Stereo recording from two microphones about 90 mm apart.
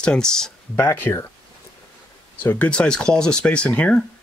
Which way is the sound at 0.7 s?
25° left (ahead or behind).